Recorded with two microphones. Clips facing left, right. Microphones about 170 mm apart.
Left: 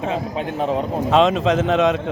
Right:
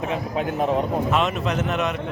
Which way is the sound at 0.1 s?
30° left (ahead or behind).